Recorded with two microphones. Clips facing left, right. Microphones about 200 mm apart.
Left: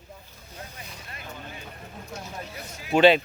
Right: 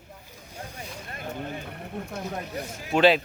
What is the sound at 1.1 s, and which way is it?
Vehicle, 50° right (ahead or behind).